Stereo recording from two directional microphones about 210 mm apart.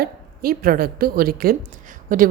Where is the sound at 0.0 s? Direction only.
45° right (ahead or behind).